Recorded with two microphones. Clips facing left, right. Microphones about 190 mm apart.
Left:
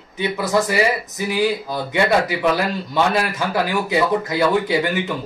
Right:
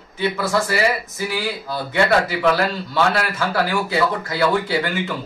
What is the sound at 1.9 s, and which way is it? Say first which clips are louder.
Speech: even; 15° left (ahead or behind).